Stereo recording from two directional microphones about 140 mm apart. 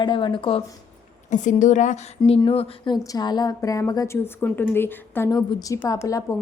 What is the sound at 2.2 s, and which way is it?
A woman's voice, 45° left (ahead or behind).